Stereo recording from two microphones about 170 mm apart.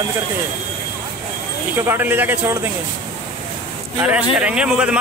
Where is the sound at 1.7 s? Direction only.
15° right (ahead or behind).